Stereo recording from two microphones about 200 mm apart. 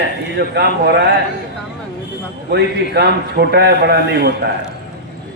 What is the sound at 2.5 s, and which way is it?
A man's voice, 55° right (ahead or behind).